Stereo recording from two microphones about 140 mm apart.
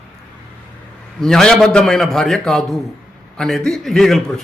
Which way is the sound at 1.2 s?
5° left (ahead or behind).